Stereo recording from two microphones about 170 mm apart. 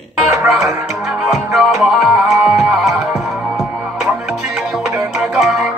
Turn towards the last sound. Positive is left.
turn(degrees=0)  # may be behind; listen again after turning